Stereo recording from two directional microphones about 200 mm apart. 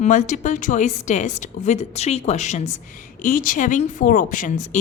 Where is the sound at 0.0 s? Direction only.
35° left (ahead or behind).